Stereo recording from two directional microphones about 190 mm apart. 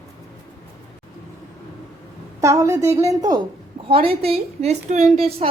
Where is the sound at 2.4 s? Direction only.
15° right (ahead or behind).